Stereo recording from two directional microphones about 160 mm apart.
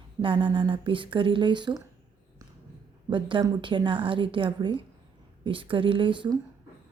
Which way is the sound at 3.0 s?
30° right (ahead or behind).